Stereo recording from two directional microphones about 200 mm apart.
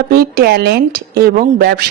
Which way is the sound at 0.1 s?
50° right (ahead or behind).